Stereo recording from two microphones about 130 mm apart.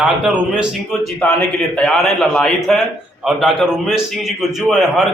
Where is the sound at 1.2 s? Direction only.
10° left (ahead or behind).